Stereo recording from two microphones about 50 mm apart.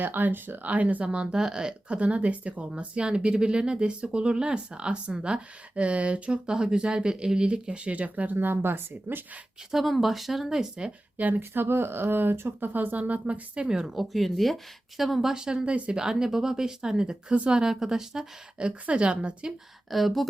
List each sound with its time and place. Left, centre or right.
0.0 s speech: right
9.7 s speech: centre
11.2 s speech: right
13.7 s a woman's voice: centre
13.9 s a woman's voice: centre
18.6 s speech: right
19.9 s speech: centre